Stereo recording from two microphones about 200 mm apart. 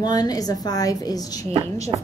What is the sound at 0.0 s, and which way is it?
A woman's voice, 20° left (ahead or behind).